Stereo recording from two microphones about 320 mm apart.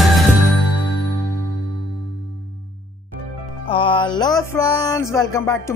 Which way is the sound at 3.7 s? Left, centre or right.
Centre.